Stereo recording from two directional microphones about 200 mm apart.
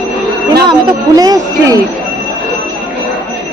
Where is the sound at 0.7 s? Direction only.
20° right (ahead or behind).